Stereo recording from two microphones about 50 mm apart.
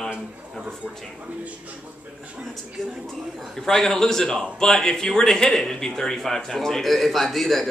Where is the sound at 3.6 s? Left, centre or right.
Centre.